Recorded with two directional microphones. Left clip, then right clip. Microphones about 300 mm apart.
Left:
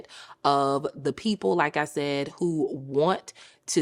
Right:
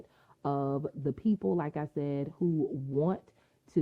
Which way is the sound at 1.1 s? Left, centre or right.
Centre.